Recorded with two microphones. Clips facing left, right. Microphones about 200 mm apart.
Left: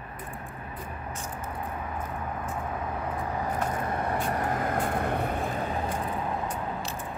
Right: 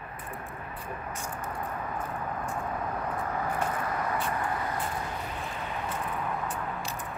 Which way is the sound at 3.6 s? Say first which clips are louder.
Left 2 dB; 25° left (ahead or behind).